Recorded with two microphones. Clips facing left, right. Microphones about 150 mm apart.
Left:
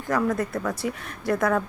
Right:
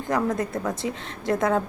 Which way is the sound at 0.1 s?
20° right (ahead or behind).